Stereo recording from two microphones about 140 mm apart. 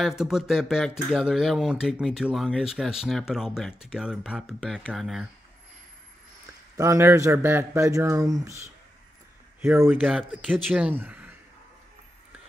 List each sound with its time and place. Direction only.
0.2 s speech: centre (ahead or behind)
6.8 s a man's voice: 20° right (ahead or behind)